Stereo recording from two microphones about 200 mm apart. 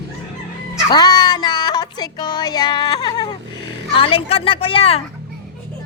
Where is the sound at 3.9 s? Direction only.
25° left (ahead or behind).